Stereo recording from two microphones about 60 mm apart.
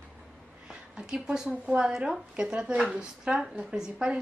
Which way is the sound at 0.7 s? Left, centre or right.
Centre.